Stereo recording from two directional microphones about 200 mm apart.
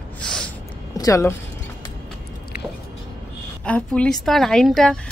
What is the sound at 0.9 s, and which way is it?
Speech, 15° left (ahead or behind).